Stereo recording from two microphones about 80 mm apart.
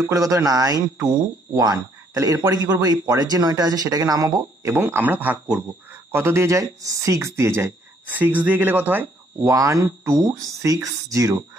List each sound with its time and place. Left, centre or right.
0.0 s speech: right
4.7 s speech: right
8.1 s speech: right
9.5 s speech: right